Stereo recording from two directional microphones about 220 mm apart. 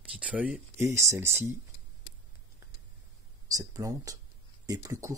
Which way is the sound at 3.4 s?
15° right (ahead or behind).